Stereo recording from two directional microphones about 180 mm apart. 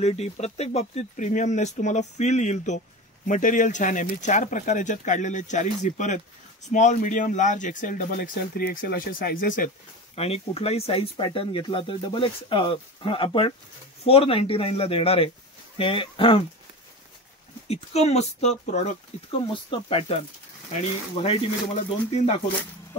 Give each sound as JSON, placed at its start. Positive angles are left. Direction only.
{"t": 0.0, "sound": "speech", "side_deg": 40}
{"t": 10.1, "sound": "speech", "side_deg": 35}
{"t": 17.6, "sound": "speech", "side_deg": 35}
{"t": 19.4, "sound": "speech", "side_deg": 25}